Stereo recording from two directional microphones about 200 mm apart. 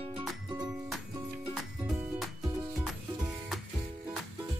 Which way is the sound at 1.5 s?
Centre (ahead or behind).